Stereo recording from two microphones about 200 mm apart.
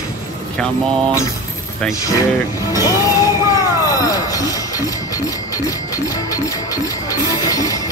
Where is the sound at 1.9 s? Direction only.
15° left (ahead or behind).